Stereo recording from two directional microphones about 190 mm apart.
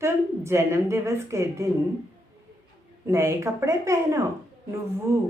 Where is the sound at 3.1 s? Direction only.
15° right (ahead or behind).